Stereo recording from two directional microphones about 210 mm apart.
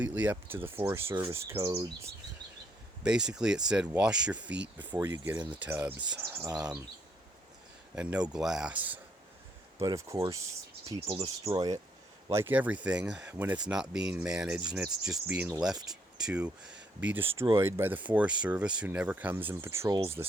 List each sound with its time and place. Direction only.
0.0 s speech: 5° right (ahead or behind)
3.0 s speech: 5° right (ahead or behind)
7.9 s speech: 5° right (ahead or behind)
10.8 s speech: 25° right (ahead or behind)